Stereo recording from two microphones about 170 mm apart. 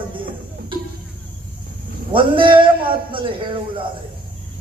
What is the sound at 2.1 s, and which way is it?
A man's voice, 30° right (ahead or behind).